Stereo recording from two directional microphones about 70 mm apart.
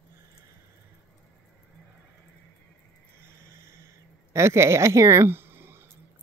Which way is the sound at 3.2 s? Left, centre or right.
Right.